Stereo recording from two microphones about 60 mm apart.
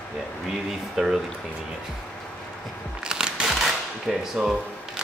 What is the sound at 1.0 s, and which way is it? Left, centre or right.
Speech, centre.